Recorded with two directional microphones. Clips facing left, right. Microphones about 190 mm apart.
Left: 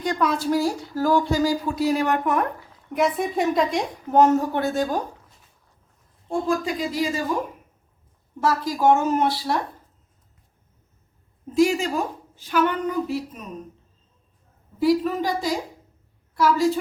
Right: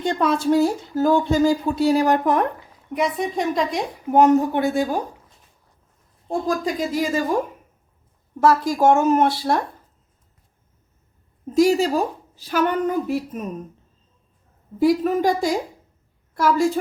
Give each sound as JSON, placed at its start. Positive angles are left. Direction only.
{"t": 0.0, "sound": "speech", "side_deg": -30}
{"t": 2.9, "sound": "a woman's voice", "side_deg": 0}
{"t": 4.1, "sound": "a woman's voice", "side_deg": -15}
{"t": 6.7, "sound": "a woman's voice", "side_deg": -50}
{"t": 8.4, "sound": "a woman's voice", "side_deg": -50}
{"t": 11.5, "sound": "a woman's voice", "side_deg": -40}
{"t": 14.8, "sound": "a woman's voice", "side_deg": -50}